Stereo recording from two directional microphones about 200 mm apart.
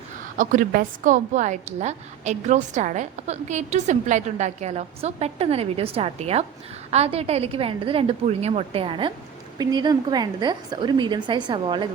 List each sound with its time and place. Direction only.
0.3 s a woman's voice: 45° right (ahead or behind); by 11.9 s 25° right (ahead or behind)